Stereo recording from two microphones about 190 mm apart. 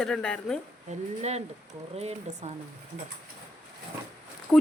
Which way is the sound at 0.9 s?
35° right (ahead or behind).